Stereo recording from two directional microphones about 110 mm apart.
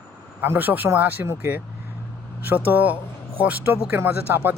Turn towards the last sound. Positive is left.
turn(degrees=-20)  # may be behind; listen again after turning